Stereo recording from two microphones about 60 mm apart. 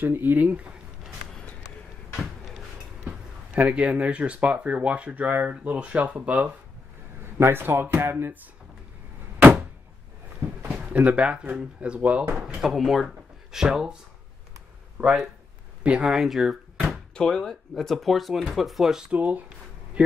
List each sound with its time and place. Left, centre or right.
0.0 s speech: right
3.5 s speech: right
7.3 s speech: right
9.4 s a sound: right
10.9 s speech: right
12.4 s speech: centre
15.8 s speech: centre
16.1 s speech: centre
17.1 s speech: centre
19.1 s speech: right